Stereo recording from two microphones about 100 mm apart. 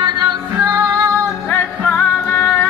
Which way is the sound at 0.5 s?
25° right (ahead or behind).